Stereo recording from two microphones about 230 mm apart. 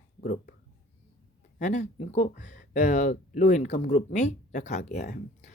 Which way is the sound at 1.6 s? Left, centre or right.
Left.